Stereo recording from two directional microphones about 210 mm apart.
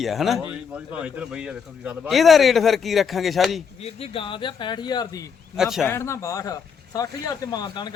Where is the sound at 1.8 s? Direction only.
Centre (ahead or behind).